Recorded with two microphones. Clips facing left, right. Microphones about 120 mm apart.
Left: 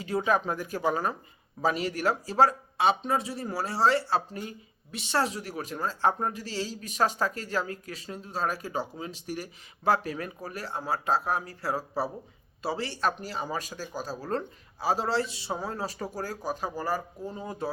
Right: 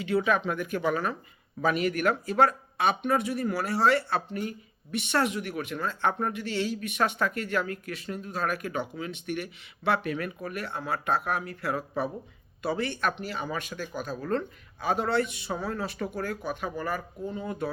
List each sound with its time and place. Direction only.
0.0 s speech: 35° left (ahead or behind)